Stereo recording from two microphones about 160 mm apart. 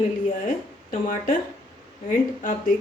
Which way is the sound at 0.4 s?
55° left (ahead or behind).